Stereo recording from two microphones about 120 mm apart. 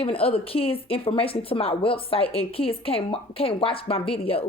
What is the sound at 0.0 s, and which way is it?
A woman's voice, 50° left (ahead or behind).